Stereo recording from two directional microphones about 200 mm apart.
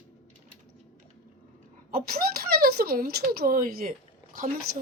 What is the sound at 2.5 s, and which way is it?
Speech, 50° right (ahead or behind).